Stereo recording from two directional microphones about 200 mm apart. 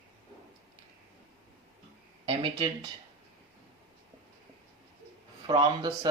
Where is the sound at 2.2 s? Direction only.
25° right (ahead or behind).